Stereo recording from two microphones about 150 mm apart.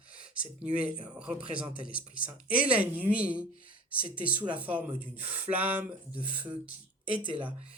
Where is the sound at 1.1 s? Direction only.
5° right (ahead or behind).